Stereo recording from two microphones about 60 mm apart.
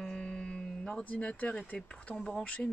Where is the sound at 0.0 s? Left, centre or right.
Centre.